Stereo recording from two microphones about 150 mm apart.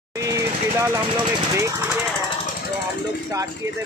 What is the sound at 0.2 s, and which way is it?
Vehicle, 20° right (ahead or behind).